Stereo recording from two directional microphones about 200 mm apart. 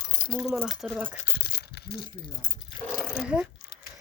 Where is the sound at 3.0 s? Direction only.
Centre (ahead or behind).